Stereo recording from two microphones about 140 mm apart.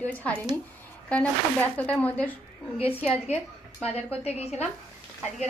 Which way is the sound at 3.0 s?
45° left (ahead or behind).